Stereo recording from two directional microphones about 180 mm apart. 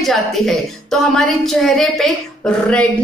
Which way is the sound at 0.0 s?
Centre (ahead or behind).